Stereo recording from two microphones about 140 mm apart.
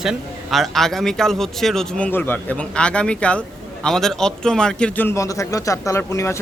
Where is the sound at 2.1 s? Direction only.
15° left (ahead or behind).